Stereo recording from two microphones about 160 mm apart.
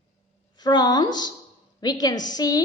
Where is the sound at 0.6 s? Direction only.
25° left (ahead or behind).